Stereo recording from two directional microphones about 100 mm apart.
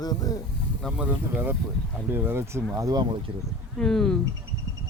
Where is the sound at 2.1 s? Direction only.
20° right (ahead or behind).